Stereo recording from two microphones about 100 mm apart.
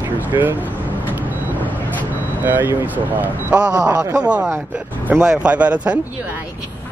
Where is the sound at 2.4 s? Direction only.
20° right (ahead or behind).